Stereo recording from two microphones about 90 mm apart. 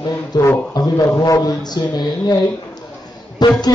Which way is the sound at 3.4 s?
50° left (ahead or behind).